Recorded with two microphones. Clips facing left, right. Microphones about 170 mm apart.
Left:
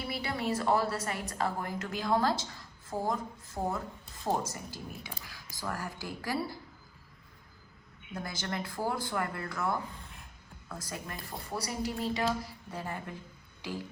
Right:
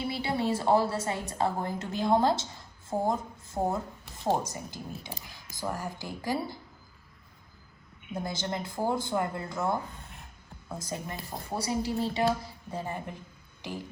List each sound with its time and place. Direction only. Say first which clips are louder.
0.0 s a woman's voice: right 4 dB; 25° right (ahead or behind)
8.1 s a woman's voice: right 4 dB; 20° right (ahead or behind)
12.7 s a woman's voice: right 3 dB; 20° right (ahead or behind)
13.6 s a sound: even; 20° right (ahead or behind)